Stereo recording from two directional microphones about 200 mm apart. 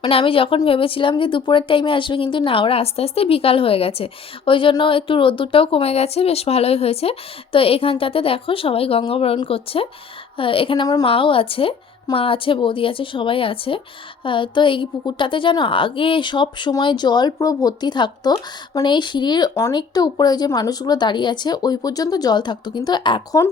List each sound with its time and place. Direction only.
0.0 s speech: 25° left (ahead or behind)